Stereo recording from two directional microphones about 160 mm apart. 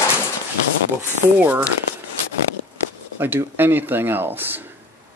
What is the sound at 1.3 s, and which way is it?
Speech, 10° right (ahead or behind).